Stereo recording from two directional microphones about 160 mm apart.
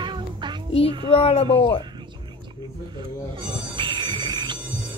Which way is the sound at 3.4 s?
30° right (ahead or behind).